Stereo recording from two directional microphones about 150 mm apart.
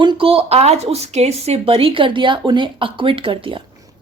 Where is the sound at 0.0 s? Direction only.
35° right (ahead or behind).